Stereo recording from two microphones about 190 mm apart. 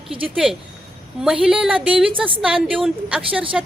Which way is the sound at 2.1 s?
25° right (ahead or behind).